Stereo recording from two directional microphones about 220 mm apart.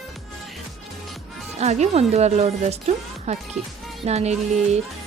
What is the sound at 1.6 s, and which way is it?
Speech, 30° right (ahead or behind).